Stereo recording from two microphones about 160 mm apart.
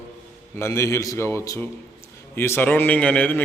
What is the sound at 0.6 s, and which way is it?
A man's voice, 20° left (ahead or behind).